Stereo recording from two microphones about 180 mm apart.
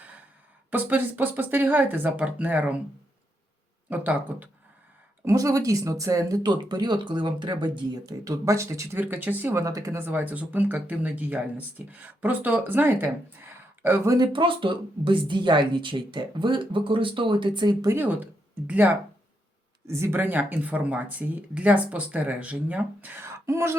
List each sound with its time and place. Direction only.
0.7 s speech: 10° right (ahead or behind)
3.8 s speech: 10° right (ahead or behind); by 17.9 s 25° right (ahead or behind)
17.9 s speech: 10° right (ahead or behind)